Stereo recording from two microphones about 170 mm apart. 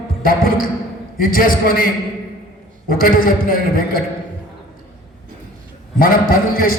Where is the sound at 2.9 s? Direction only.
55° left (ahead or behind).